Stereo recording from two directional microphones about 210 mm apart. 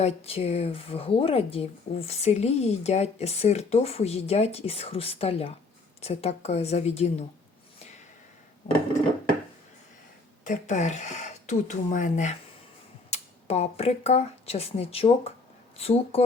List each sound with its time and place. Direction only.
0.0 s speech: 30° left (ahead or behind)
10.4 s speech: 35° left (ahead or behind)